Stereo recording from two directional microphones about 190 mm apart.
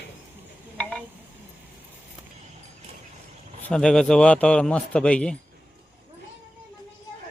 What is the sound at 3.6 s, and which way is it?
A man's voice, 5° left (ahead or behind).